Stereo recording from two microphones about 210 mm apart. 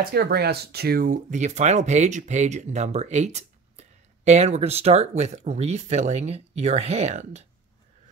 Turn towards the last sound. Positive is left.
turn(degrees=-30)  # may be behind; listen again after turning